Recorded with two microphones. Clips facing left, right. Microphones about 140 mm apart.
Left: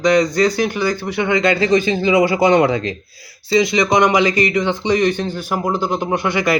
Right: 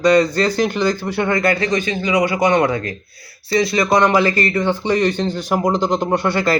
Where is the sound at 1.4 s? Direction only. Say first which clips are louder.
Left 3 dB; 25° left (ahead or behind).